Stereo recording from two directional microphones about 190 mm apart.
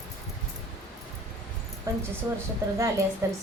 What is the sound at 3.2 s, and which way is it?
Speech, 15° right (ahead or behind).